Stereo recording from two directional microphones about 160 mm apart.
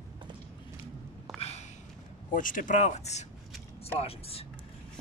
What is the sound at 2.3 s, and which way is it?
Speech, 55° left (ahead or behind).